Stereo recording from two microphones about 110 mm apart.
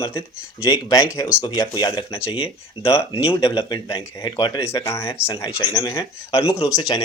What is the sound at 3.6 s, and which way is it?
Speech, 40° left (ahead or behind).